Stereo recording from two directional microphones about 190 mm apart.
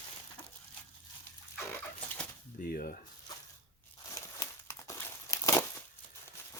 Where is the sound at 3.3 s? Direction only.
20° left (ahead or behind).